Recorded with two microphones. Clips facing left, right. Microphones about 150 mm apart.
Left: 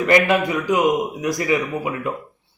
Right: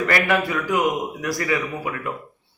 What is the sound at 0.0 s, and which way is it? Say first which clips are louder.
A man's voice: left 4 dB; 20° left (ahead or behind).